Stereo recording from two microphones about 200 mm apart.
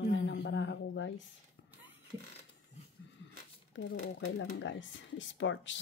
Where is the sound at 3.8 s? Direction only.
65° left (ahead or behind).